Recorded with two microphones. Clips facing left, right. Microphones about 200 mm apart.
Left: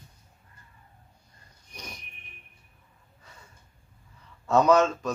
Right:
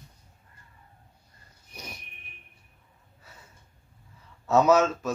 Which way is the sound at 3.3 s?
5° right (ahead or behind).